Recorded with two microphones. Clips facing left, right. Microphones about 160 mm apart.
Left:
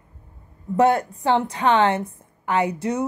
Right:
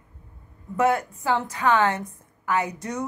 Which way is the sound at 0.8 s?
30° left (ahead or behind).